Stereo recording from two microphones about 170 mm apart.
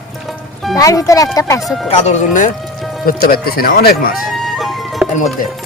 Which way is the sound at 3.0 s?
60° left (ahead or behind).